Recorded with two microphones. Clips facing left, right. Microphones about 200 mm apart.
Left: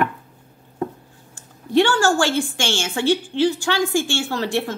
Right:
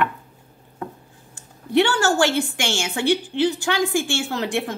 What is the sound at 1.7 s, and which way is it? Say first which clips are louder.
A woman's voice: left 1 dB; 20° right (ahead or behind).